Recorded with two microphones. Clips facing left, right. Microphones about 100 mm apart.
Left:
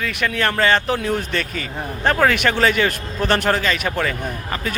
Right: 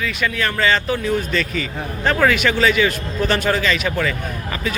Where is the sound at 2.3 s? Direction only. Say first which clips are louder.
Right 1 dB; 55° left (ahead or behind).